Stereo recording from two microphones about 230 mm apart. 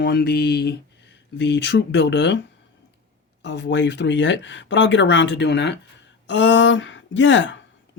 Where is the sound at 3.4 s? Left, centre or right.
Left.